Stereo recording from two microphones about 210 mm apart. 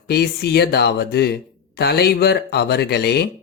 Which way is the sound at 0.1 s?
50° left (ahead or behind).